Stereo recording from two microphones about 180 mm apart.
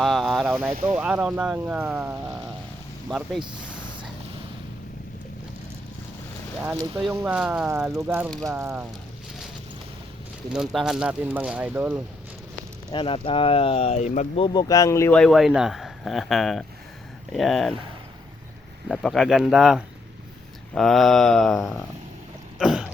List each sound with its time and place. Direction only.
0.0 s boat: centre (ahead or behind)
0.9 s speech: 5° right (ahead or behind)
6.6 s speech: 10° right (ahead or behind)
7.7 s speech: 15° right (ahead or behind)
10.5 s speech: centre (ahead or behind)
12.9 s speech: 30° left (ahead or behind)
14.4 s speech: 25° left (ahead or behind)
15.1 s speech: centre (ahead or behind)
18.9 s speech: centre (ahead or behind)
22.5 s throat clearing: 5° right (ahead or behind)